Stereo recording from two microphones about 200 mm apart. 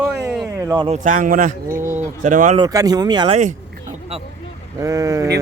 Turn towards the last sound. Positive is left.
turn(degrees=-15)  # may be behind; listen again after turning